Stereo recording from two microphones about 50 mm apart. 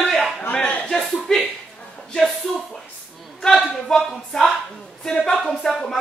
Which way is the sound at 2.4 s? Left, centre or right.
Centre.